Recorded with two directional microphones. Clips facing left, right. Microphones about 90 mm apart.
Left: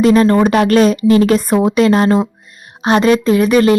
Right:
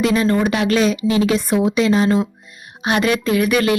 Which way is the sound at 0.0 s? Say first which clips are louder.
Left 6 dB; 45° left (ahead or behind).